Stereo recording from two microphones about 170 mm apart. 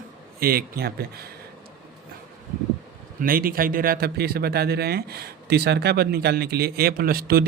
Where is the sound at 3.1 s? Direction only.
60° right (ahead or behind).